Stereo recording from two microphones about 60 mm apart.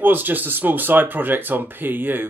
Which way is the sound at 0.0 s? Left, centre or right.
Right.